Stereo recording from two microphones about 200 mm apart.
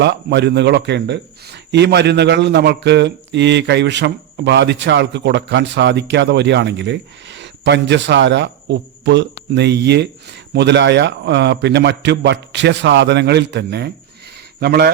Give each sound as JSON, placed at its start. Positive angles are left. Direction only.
{"t": 0.0, "sound": "a man's voice", "side_deg": -60}